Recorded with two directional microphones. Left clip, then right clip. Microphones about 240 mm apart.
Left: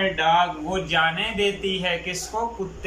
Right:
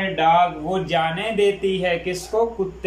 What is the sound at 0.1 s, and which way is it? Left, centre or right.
Speech, right.